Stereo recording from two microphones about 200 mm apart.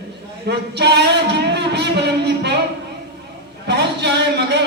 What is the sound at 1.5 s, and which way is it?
Saxophone, 60° right (ahead or behind).